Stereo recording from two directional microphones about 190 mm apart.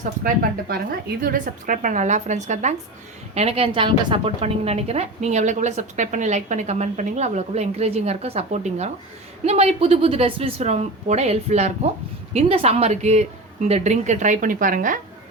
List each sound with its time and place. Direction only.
0.3 s a woman's voice: 50° right (ahead or behind)